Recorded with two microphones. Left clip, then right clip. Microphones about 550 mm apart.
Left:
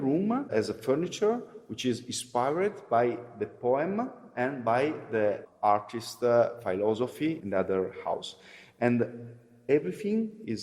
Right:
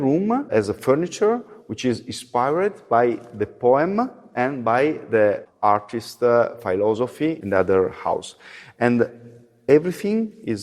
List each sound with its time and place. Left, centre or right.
0.0 s speech: right